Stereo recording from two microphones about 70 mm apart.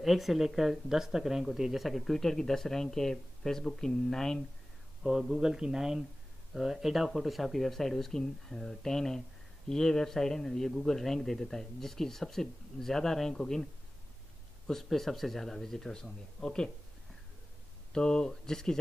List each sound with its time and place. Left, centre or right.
0.0 s speech: centre
5.0 s a man's voice: centre
14.7 s speech: centre
17.9 s speech: centre